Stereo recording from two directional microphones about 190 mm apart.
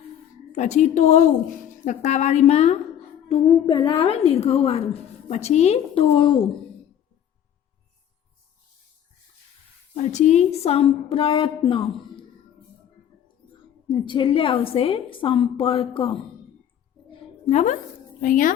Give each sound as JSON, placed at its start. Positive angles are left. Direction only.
{"t": 0.5, "sound": "a woman's voice", "side_deg": 35}
{"t": 9.9, "sound": "a woman's voice", "side_deg": 40}
{"t": 13.8, "sound": "a woman's voice", "side_deg": 25}
{"t": 17.1, "sound": "a sound", "side_deg": 35}
{"t": 18.2, "sound": "speech", "side_deg": 45}